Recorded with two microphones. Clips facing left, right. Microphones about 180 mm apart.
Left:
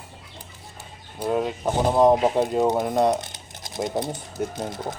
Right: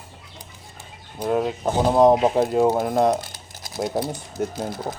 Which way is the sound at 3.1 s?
20° left (ahead or behind).